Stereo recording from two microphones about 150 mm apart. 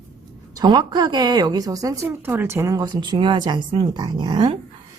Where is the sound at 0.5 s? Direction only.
30° right (ahead or behind).